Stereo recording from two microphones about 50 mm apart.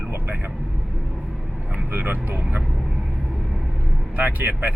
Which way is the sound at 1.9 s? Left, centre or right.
Right.